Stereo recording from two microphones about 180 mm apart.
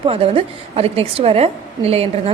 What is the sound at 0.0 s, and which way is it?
A woman's voice, 30° right (ahead or behind).